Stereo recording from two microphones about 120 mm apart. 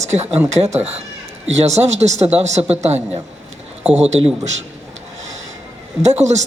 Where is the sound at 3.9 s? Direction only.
65° right (ahead or behind).